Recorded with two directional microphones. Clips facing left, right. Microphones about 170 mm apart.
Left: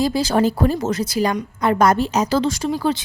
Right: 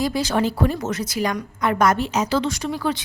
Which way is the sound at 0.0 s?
30° left (ahead or behind).